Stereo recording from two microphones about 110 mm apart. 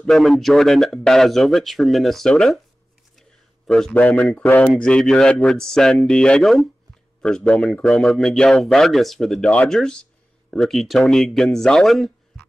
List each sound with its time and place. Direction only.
0.0 s speech: 5° left (ahead or behind)
3.2 s a sound: 5° left (ahead or behind)
3.9 s a man's voice: 15° left (ahead or behind)